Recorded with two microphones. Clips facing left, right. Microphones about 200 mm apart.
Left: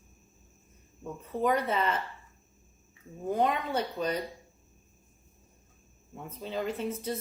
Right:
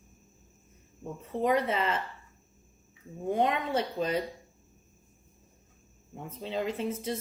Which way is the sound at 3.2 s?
25° right (ahead or behind).